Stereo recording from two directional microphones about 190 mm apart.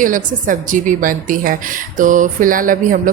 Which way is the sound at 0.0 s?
45° right (ahead or behind).